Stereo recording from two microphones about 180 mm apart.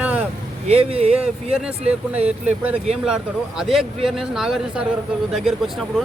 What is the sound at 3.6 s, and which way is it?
Speech, centre (ahead or behind).